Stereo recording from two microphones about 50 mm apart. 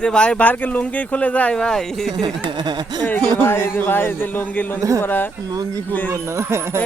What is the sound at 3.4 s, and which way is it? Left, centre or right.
Speech, left.